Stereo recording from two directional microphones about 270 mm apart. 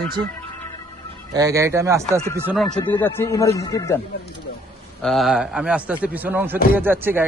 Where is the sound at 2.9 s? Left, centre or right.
Centre.